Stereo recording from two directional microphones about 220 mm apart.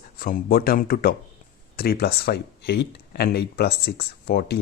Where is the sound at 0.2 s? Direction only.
40° left (ahead or behind).